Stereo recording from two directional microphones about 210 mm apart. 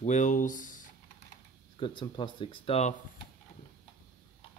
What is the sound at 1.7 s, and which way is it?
Speech, 25° left (ahead or behind).